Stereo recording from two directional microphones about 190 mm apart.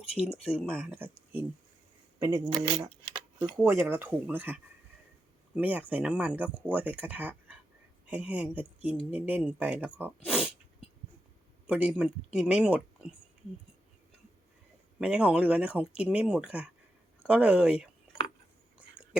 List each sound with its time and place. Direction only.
0.1 s speech: 5° right (ahead or behind)
0.9 s speech: 10° right (ahead or behind)
10.2 s sneeze: 5° right (ahead or behind)
11.6 s speech: 5° right (ahead or behind)
14.9 s speech: 5° right (ahead or behind)